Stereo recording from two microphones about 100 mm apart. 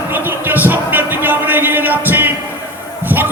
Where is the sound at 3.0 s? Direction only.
20° right (ahead or behind).